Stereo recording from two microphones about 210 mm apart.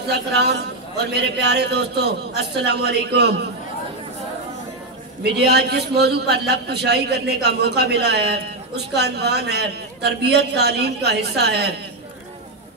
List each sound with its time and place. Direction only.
0.1 s a man's voice: 50° right (ahead or behind)
5.2 s a man's voice: 50° right (ahead or behind)